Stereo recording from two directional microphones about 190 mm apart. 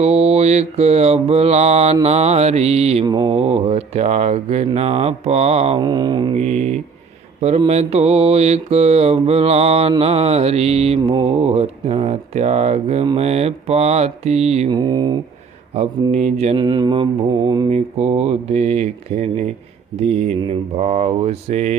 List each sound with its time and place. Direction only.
0.0 s speech: 35° right (ahead or behind)
6.4 s speech: 35° right (ahead or behind)
14.7 s mantra: 20° right (ahead or behind)
15.7 s speech: 35° right (ahead or behind)
16.6 s mantra: 20° right (ahead or behind)
17.7 s speech: 35° right (ahead or behind)